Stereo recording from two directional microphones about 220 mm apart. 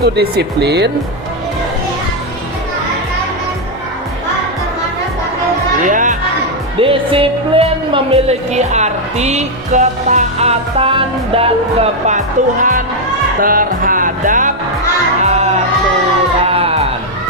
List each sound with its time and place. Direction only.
0.0 s speech: 45° right (ahead or behind)
5.8 s music: 35° right (ahead or behind)
6.7 s a woman's voice: 25° right (ahead or behind)
13.4 s music: 40° right (ahead or behind)